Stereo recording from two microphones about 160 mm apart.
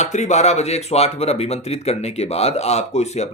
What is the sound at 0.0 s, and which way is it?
Speech, 45° left (ahead or behind).